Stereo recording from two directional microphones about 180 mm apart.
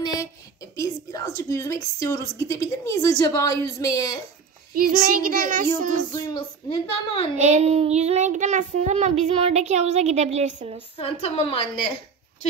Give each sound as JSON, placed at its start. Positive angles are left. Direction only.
{"t": 0.0, "sound": "a woman's voice", "side_deg": 20}
{"t": 4.7, "sound": "a child's voice", "side_deg": -55}
{"t": 6.2, "sound": "a woman's voice", "side_deg": 25}
{"t": 7.3, "sound": "child singing", "side_deg": -40}
{"t": 11.0, "sound": "a woman's voice", "side_deg": 35}